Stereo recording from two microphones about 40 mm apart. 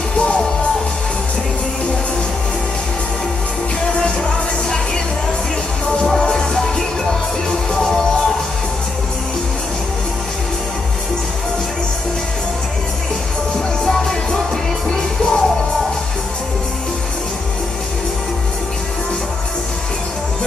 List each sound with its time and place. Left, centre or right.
4.0 s music: left
6.0 s music: centre
13.8 s music: centre